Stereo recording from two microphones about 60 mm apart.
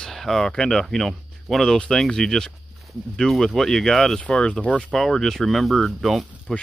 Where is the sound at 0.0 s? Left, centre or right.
Centre.